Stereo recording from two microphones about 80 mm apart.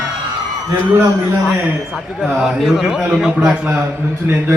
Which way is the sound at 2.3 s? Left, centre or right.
Centre.